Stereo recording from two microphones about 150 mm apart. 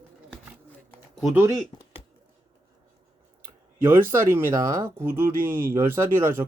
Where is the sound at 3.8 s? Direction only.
15° right (ahead or behind).